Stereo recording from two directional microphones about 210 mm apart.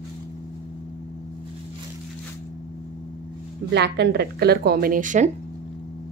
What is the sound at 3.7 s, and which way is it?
A woman's voice, 50° right (ahead or behind).